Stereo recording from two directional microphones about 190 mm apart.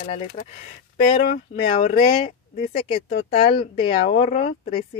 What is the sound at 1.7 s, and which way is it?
Speech, 40° left (ahead or behind).